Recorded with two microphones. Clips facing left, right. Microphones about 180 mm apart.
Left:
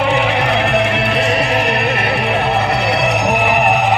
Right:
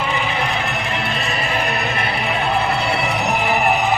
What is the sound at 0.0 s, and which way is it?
Music, 70° left (ahead or behind).